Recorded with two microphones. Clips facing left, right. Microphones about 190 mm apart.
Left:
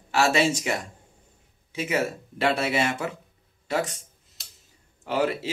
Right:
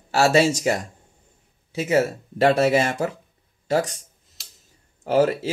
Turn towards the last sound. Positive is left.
turn(degrees=-40)  # may be behind; listen again after turning